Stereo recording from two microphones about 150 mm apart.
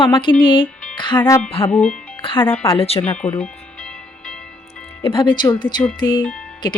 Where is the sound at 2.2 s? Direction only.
35° left (ahead or behind).